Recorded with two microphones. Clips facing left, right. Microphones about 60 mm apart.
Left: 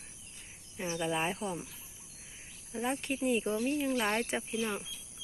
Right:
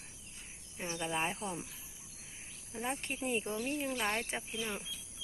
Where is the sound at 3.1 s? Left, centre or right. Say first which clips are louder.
Left 7 dB; right.